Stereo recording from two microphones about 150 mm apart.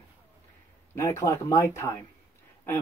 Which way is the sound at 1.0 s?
20° left (ahead or behind).